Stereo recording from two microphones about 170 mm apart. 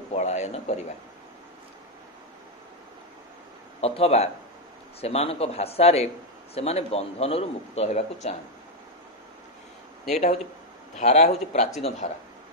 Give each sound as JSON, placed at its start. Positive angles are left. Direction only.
{"t": 0.1, "sound": "a man's voice", "side_deg": 40}
{"t": 3.8, "sound": "a man's voice", "side_deg": 35}
{"t": 10.1, "sound": "a man's voice", "side_deg": 40}